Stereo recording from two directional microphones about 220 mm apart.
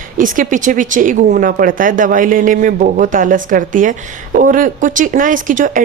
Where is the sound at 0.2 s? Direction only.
35° right (ahead or behind).